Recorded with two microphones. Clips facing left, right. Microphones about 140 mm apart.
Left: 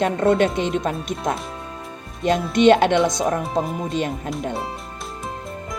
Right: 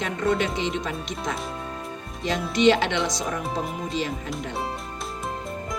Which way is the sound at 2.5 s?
55° left (ahead or behind).